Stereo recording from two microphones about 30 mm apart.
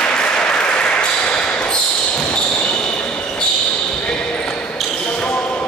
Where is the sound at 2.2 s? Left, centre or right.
Left.